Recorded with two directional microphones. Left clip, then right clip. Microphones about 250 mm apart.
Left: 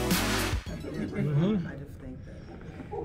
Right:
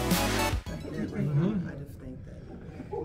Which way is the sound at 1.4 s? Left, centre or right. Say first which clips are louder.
Left 2 dB; left.